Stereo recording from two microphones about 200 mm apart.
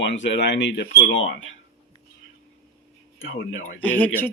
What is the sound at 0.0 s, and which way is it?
Speech, 65° left (ahead or behind).